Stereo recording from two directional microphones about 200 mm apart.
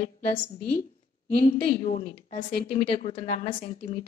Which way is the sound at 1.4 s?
35° left (ahead or behind).